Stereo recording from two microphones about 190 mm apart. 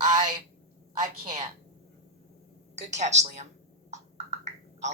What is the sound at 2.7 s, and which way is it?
Speech, 35° right (ahead or behind).